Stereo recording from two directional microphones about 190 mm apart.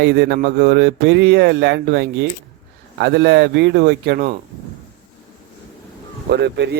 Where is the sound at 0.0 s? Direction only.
65° right (ahead or behind).